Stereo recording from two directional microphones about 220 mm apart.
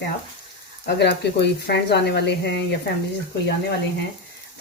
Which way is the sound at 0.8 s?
50° left (ahead or behind).